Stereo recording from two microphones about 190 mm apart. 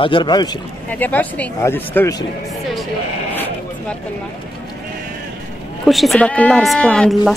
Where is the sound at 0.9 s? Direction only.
10° left (ahead or behind).